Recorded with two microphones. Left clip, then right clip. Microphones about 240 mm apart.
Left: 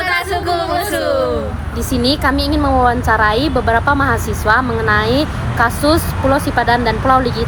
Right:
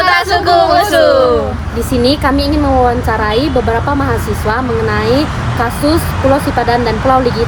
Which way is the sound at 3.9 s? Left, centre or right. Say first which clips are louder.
Even; centre.